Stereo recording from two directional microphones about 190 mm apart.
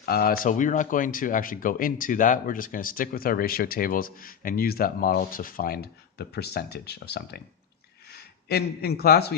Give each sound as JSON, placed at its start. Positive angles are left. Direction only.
{"t": 0.0, "sound": "speech", "side_deg": 50}